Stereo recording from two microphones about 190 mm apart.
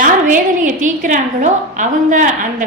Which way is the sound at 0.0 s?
40° right (ahead or behind).